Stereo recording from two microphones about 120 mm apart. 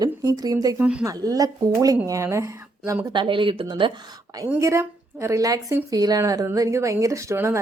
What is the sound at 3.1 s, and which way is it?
Speech, 45° right (ahead or behind).